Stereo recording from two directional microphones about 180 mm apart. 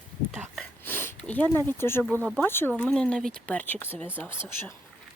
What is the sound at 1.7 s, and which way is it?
Speech, 15° left (ahead or behind).